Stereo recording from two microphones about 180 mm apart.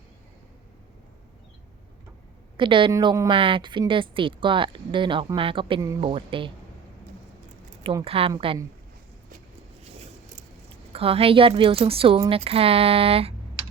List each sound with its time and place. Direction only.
2.6 s a woman's voice: 25° right (ahead or behind)
8.0 s speech: 30° right (ahead or behind)
10.0 s a sound: 35° right (ahead or behind)
12.3 s speech: 30° right (ahead or behind)